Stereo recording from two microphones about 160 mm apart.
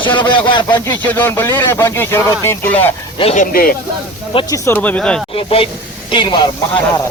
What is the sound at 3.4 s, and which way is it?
Speech, 60° left (ahead or behind).